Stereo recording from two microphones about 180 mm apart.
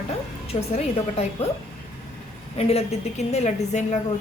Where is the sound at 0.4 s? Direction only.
35° left (ahead or behind).